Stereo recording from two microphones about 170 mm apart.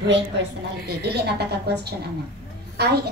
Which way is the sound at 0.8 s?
70° right (ahead or behind).